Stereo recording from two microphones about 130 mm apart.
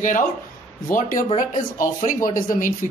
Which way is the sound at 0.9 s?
90° left.